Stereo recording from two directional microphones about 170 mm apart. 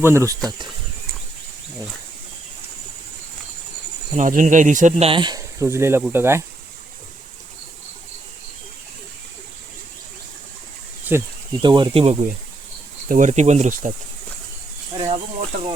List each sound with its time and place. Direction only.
0.0 s speech: 15° right (ahead or behind)
4.1 s speech: 50° right (ahead or behind); by 6.4 s 15° right (ahead or behind)
11.1 s speech: 10° right (ahead or behind)
11.6 s speech: 30° right (ahead or behind)
13.1 s speech: 45° right (ahead or behind)
14.9 s speech: 25° right (ahead or behind)